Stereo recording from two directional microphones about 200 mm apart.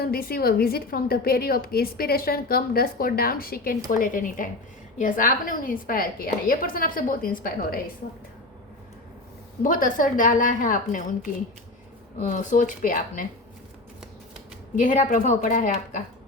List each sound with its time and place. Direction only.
0.0 s a woman's voice: 50° left (ahead or behind)
9.6 s a woman's voice: 45° left (ahead or behind)
12.2 s a woman's voice: 40° left (ahead or behind)
14.8 s a woman's voice: 40° left (ahead or behind)